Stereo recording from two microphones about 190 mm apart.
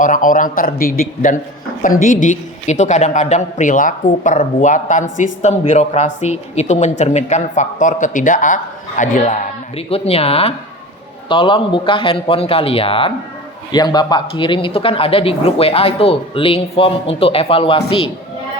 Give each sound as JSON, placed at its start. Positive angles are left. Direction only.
{"t": 0.0, "sound": "a man's voice", "side_deg": 45}